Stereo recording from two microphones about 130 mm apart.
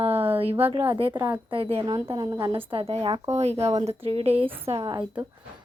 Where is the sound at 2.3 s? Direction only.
25° right (ahead or behind).